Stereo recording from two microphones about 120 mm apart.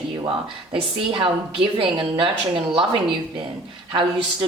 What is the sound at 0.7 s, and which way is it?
Speech, 45° right (ahead or behind).